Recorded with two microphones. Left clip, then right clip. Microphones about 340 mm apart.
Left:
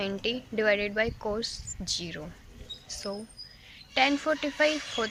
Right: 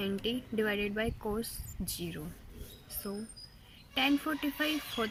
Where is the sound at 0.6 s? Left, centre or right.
Centre.